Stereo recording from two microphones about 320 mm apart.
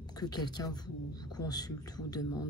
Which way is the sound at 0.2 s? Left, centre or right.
Centre.